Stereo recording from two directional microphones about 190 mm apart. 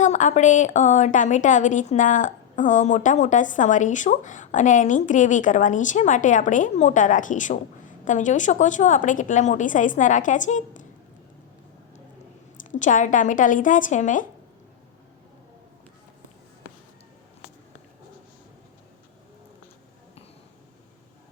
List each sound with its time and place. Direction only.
0.0 s a woman's voice: 40° left (ahead or behind)
12.6 s a woman's voice: 40° left (ahead or behind)